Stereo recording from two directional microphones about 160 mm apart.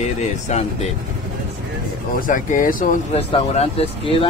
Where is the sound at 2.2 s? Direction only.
55° left (ahead or behind).